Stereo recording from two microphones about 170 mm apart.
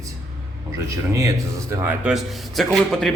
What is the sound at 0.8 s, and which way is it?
Speech, 20° right (ahead or behind).